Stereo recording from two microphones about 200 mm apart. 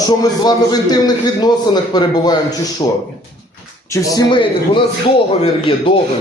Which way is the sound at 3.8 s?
15° left (ahead or behind).